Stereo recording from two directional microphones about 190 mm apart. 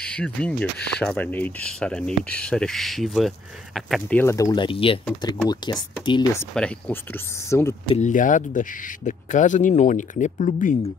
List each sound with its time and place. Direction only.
0.0 s speech: 5° left (ahead or behind)
4.2 s speech: 15° left (ahead or behind)
6.3 s speech: 10° left (ahead or behind)
7.9 s speech: 40° left (ahead or behind)